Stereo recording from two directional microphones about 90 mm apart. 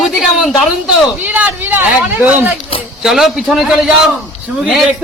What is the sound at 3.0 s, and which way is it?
Speech, 5° right (ahead or behind).